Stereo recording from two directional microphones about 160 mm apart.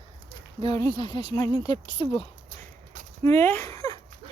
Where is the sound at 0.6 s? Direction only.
25° left (ahead or behind).